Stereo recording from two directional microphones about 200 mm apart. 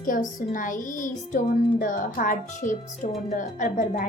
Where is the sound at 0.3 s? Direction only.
40° left (ahead or behind).